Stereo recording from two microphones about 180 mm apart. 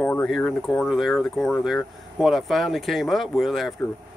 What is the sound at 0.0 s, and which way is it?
Speech, 5° left (ahead or behind).